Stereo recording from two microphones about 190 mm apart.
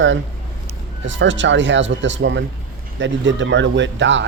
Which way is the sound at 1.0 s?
75° right (ahead or behind).